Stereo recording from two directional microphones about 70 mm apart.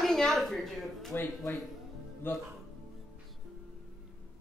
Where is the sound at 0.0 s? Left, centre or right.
Centre.